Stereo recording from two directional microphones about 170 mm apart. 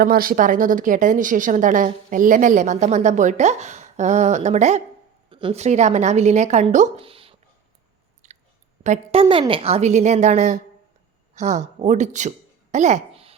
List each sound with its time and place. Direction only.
0.0 s a woman's voice: 60° right (ahead or behind); by 7.0 s 45° right (ahead or behind)
7.0 s a sound: 35° right (ahead or behind)
8.2 s chewing: 45° right (ahead or behind)
8.8 s a woman's voice: 45° right (ahead or behind)
9.3 s a woman's voice: 30° right (ahead or behind)
12.7 s a sound: 45° right (ahead or behind)